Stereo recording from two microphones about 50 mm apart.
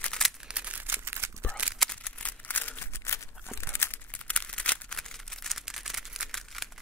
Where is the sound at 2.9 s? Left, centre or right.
Left.